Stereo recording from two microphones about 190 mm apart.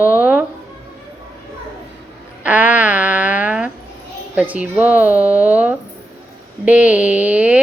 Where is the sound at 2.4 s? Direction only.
10° right (ahead or behind).